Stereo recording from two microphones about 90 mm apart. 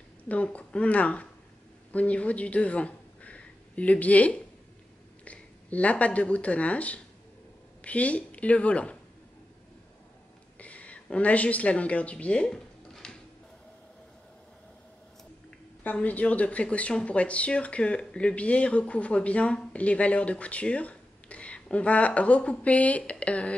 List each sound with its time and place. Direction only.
0.3 s speech: 15° left (ahead or behind)
10.6 s a woman's voice: 15° left (ahead or behind)
15.8 s speech: 20° left (ahead or behind)